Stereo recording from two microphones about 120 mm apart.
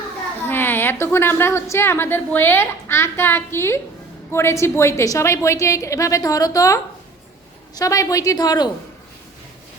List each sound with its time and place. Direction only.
0.4 s a woman's voice: 15° left (ahead or behind)
7.8 s a woman's voice: 30° left (ahead or behind)